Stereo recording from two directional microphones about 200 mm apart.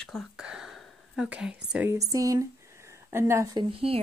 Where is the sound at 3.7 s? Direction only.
30° right (ahead or behind).